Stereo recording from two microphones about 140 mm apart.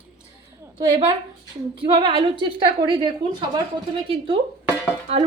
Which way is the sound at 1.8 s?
35° right (ahead or behind).